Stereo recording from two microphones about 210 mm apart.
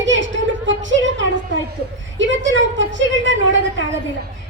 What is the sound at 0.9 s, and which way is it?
A woman's voice, 60° right (ahead or behind).